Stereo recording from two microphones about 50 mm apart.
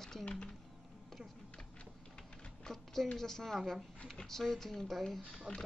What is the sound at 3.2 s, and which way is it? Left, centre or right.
A woman's voice, centre.